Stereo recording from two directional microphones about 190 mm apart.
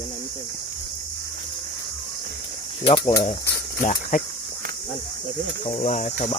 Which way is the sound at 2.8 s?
25° left (ahead or behind).